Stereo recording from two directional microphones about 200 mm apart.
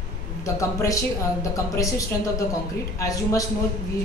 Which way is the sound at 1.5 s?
15° left (ahead or behind).